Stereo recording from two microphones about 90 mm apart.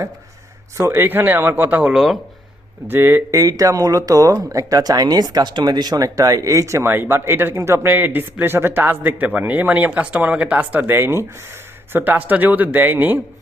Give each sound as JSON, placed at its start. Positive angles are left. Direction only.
{"t": 0.8, "sound": "speech", "side_deg": -25}
{"t": 1.9, "sound": "speech", "side_deg": -5}
{"t": 2.8, "sound": "speech", "side_deg": -25}
{"t": 3.3, "sound": "speech", "side_deg": -40}